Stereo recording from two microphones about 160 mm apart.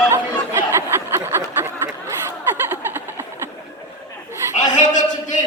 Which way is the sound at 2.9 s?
15° right (ahead or behind).